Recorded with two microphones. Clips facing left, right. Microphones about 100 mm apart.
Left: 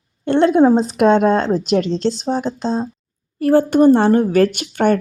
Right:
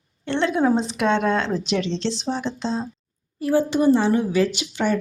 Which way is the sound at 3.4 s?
55° left (ahead or behind).